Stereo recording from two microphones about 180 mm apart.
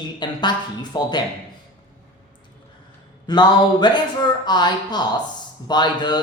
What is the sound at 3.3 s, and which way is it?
Speech, 25° left (ahead or behind).